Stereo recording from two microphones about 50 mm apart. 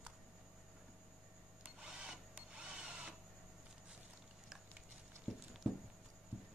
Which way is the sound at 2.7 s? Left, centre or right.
Centre.